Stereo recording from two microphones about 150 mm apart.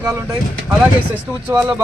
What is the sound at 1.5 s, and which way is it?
Speech, 20° right (ahead or behind).